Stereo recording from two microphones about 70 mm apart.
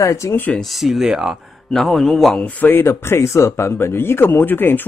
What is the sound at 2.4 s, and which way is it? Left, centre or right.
Speech, left.